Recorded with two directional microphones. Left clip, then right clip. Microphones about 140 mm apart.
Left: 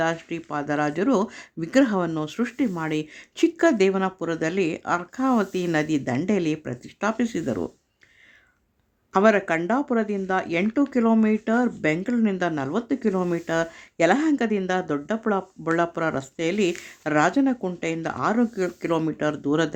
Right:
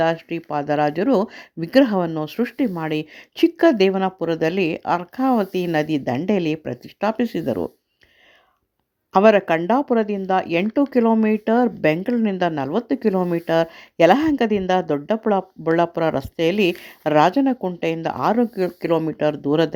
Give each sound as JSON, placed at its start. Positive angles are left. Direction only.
{"t": 0.0, "sound": "speech", "side_deg": -25}
{"t": 9.1, "sound": "speech", "side_deg": -30}